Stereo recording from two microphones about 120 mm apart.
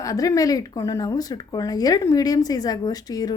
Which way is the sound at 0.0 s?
30° left (ahead or behind).